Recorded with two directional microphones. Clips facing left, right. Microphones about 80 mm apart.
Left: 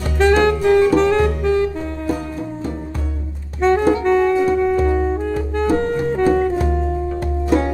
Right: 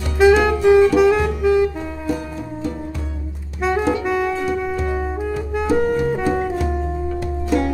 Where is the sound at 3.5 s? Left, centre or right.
Centre.